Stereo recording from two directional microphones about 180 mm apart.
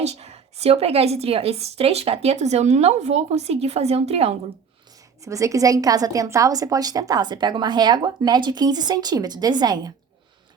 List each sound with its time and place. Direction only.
0.0 s a woman's voice: 35° right (ahead or behind)
5.2 s a woman's voice: 15° right (ahead or behind)